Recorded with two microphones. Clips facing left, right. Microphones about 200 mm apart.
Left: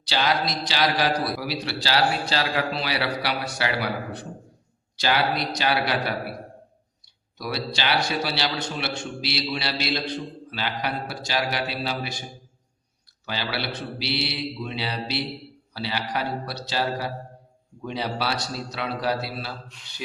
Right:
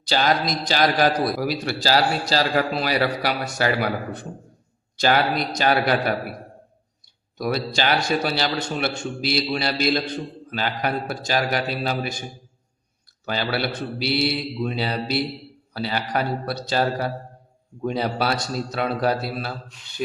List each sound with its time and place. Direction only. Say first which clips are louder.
0.1 s a man's voice: right 3 dB; 45° right (ahead or behind)
7.3 s a man's voice: right 5 dB; 50° right (ahead or behind)
13.2 s a man's voice: right 5 dB; 50° right (ahead or behind)